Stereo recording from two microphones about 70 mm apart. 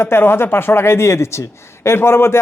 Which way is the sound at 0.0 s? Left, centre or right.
Left.